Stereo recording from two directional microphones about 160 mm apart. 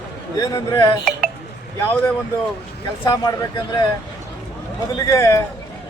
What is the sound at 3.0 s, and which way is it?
Speech, 25° left (ahead or behind).